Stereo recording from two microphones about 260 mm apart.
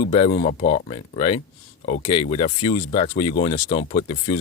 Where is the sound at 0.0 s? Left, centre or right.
Left.